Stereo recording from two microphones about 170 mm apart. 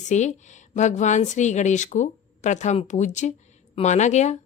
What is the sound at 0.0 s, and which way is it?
A woman's voice, 45° left (ahead or behind).